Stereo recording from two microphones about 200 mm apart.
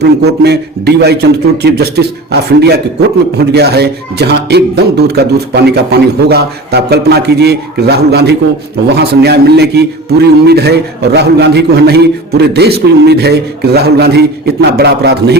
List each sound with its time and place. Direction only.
0.0 s a man's voice: 55° right (ahead or behind)
6.2 s a man's voice: 55° right (ahead or behind)